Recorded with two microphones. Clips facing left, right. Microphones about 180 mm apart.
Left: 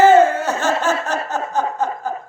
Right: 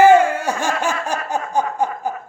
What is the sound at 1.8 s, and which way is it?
Chuckle, 10° right (ahead or behind).